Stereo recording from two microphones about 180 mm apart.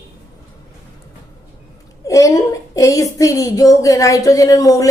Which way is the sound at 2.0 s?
20° left (ahead or behind).